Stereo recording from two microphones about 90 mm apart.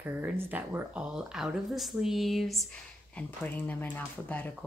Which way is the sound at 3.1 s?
20° left (ahead or behind).